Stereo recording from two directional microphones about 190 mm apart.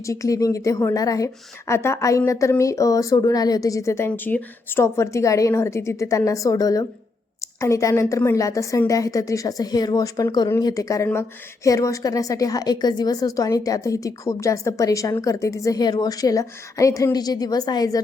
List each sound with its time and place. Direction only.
0.0 s a woman's voice: 15° left (ahead or behind)